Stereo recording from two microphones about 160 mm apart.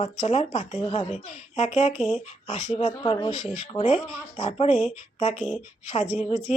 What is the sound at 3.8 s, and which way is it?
Speech, 45° left (ahead or behind).